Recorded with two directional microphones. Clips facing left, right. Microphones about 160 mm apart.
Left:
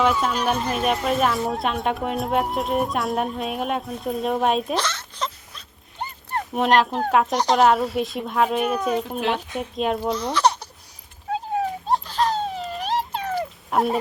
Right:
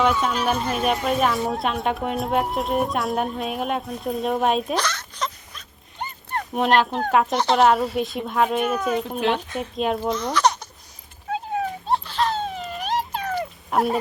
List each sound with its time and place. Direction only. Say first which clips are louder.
0.0 s a woman's voice: even; centre (ahead or behind)
4.8 s dog: even; 25° left (ahead or behind)
6.5 s a woman's voice: left 1 dB; centre (ahead or behind)
10.3 s baby laughter: even; 30° left (ahead or behind)
11.3 s dog: left 1 dB; 35° left (ahead or behind)
13.3 s dog: even; centre (ahead or behind)